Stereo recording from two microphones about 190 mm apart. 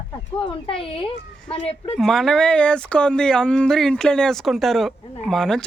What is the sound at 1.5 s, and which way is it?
Speech, 30° left (ahead or behind).